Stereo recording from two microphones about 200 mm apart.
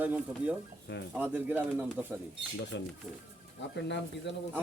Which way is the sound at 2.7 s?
65° left (ahead or behind).